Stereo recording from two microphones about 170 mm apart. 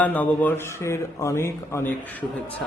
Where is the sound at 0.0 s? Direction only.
10° left (ahead or behind).